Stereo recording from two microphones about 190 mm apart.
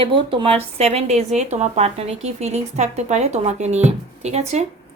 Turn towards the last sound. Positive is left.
turn(degrees=-35)  # may be behind; listen again after turning